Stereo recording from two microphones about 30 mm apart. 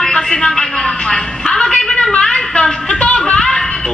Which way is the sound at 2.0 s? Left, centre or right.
Left.